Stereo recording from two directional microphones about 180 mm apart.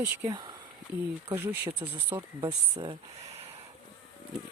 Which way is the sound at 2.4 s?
30° right (ahead or behind).